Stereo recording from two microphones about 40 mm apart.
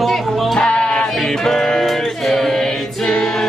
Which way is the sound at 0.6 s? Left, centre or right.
Left.